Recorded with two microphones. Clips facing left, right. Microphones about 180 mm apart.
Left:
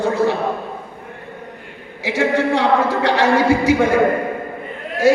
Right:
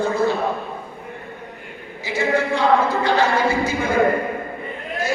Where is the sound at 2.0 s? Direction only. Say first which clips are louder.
Left 3 dB; 75° left (ahead or behind).